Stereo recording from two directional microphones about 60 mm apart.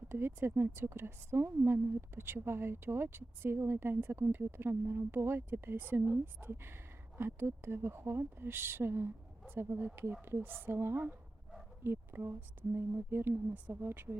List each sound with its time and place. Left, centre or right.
0.1 s a woman's voice: right